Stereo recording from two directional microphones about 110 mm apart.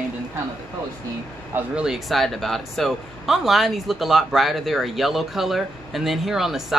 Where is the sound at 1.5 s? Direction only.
15° right (ahead or behind).